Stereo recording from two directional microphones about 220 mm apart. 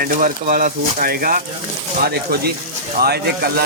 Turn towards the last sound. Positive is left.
turn(degrees=-45)  # may be behind; listen again after turning